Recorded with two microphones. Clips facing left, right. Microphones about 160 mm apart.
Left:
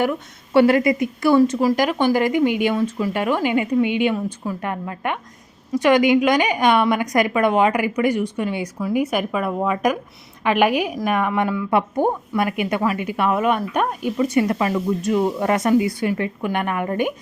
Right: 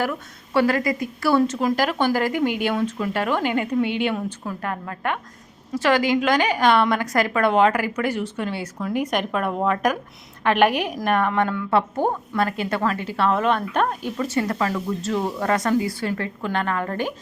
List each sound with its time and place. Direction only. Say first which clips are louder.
0.5 s a woman's voice: left 5 dB; 25° left (ahead or behind)